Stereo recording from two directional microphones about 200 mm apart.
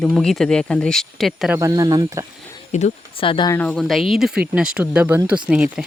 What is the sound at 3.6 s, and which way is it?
Speech, 5° left (ahead or behind).